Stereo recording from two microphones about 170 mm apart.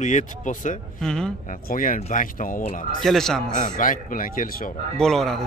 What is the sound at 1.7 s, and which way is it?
Speech, 50° left (ahead or behind).